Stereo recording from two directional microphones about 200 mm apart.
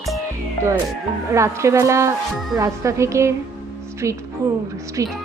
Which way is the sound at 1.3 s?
15° right (ahead or behind).